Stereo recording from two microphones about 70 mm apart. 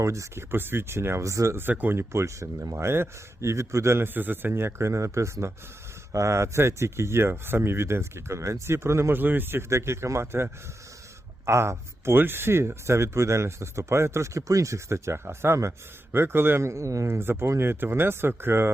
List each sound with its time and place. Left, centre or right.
0.0 s speech: right
0.5 s speech: right